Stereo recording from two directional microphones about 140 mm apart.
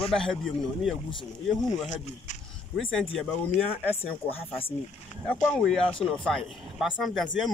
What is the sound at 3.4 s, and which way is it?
Speech, 10° left (ahead or behind).